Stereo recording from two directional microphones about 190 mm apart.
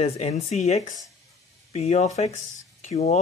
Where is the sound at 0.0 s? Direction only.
35° left (ahead or behind).